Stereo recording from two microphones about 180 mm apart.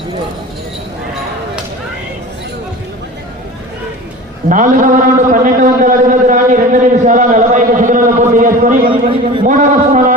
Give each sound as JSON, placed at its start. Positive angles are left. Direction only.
{"t": 4.4, "sound": "a man's voice", "side_deg": -45}
{"t": 8.9, "sound": "a man's voice", "side_deg": -30}
{"t": 9.5, "sound": "a man's voice", "side_deg": -45}